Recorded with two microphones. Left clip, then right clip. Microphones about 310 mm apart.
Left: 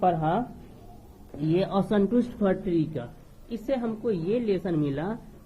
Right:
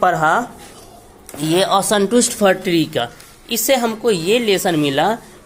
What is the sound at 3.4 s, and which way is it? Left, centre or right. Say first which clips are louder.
A woman's voice: right 13 dB; centre.